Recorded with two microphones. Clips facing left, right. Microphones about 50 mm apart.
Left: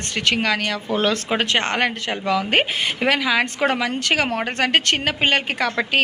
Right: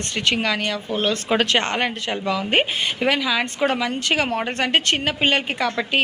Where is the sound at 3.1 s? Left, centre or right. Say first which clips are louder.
Left 2 dB; left.